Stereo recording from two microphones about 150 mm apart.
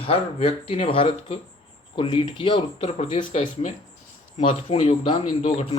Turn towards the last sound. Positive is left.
turn(degrees=40)  # may be behind; listen again after turning